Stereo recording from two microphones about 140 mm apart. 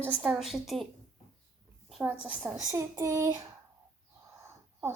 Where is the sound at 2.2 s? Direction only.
10° right (ahead or behind).